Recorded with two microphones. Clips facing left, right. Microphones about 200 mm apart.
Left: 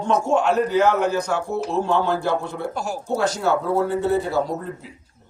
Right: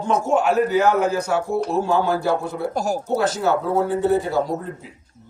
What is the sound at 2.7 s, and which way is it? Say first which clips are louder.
Speech: right 5 dB; 40° right (ahead or behind).